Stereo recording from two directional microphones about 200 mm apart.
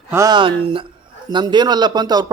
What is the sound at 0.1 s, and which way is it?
Speech, 15° right (ahead or behind).